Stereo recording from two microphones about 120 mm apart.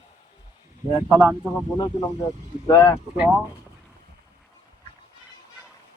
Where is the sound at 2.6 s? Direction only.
25° left (ahead or behind).